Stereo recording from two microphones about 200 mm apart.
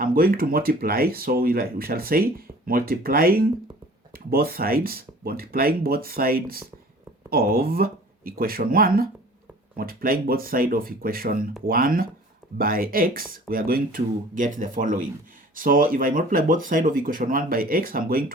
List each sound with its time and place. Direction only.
0.0 s speech: 45° right (ahead or behind)